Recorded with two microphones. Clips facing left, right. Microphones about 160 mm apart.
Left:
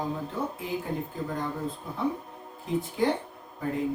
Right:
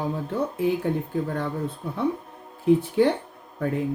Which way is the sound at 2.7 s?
65° right (ahead or behind).